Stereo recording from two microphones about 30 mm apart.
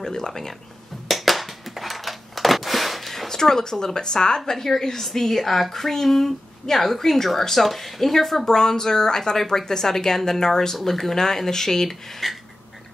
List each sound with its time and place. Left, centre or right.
0.0 s speech: centre
1.0 s a sound: centre
3.3 s speech: centre
8.5 s speech: centre